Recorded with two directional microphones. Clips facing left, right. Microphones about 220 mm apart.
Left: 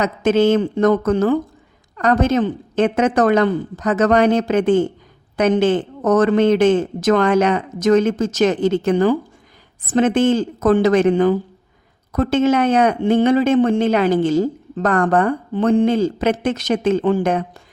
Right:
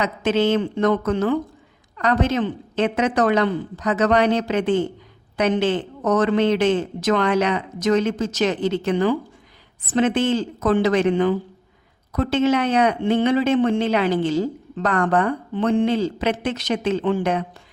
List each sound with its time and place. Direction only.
0.0 s a man's voice: 45° left (ahead or behind)